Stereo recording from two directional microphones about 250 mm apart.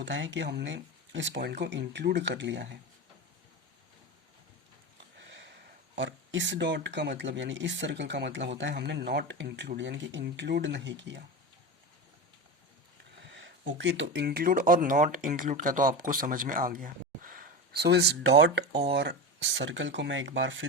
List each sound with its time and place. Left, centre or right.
0.0 s speech: right
6.0 s speech: right
13.2 s speech: right